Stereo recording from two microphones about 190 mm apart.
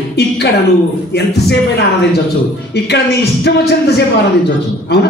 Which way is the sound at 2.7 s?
60° left (ahead or behind).